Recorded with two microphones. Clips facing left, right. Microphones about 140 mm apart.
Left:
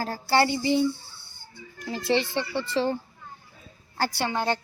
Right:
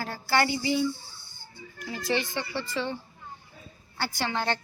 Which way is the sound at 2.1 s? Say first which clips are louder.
Left 4 dB; 30° left (ahead or behind).